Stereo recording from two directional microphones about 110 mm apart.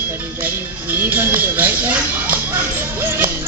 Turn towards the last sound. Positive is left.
turn(degrees=-20)  # may be behind; listen again after turning